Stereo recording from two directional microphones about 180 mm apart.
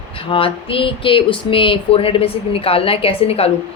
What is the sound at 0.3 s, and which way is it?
A woman's voice, 30° left (ahead or behind).